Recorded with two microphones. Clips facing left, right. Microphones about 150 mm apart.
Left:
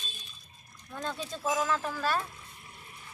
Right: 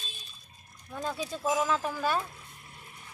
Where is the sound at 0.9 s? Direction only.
10° right (ahead or behind).